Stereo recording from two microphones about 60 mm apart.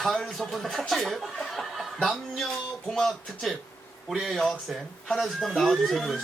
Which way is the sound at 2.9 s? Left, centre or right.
Centre.